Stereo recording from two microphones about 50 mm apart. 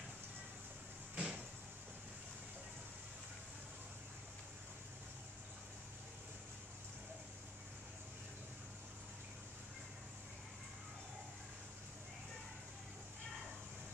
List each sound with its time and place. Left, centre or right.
1.1 s vehicle: right